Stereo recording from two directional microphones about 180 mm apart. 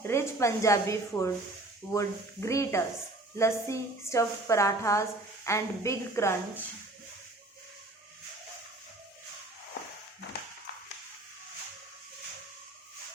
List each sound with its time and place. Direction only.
0.1 s a woman's voice: 15° left (ahead or behind)